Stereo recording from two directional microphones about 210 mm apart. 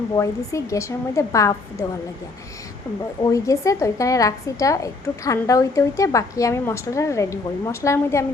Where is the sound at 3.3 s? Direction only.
15° left (ahead or behind).